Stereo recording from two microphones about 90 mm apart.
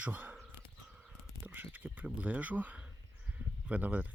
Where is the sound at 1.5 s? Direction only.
20° right (ahead or behind).